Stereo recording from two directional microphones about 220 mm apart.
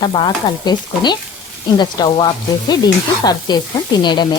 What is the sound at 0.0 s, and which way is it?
Stir, 20° left (ahead or behind).